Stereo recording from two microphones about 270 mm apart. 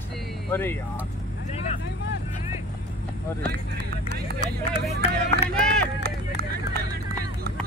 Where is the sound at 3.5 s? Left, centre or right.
Right.